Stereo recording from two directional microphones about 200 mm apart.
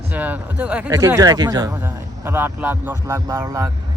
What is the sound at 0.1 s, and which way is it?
Speech, 10° right (ahead or behind).